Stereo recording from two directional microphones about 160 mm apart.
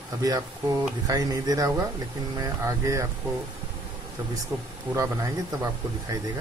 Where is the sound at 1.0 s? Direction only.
20° right (ahead or behind).